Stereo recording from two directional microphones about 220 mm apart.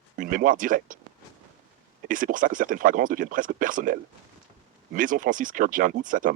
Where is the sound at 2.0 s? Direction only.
35° right (ahead or behind).